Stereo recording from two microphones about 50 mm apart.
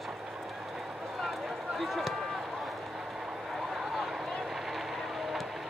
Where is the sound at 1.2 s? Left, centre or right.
Centre.